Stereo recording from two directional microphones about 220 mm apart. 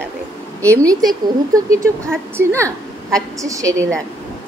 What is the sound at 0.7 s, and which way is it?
A woman's voice, 15° right (ahead or behind).